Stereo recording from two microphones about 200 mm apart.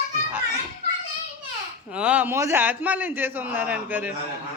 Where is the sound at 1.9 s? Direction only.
5° right (ahead or behind).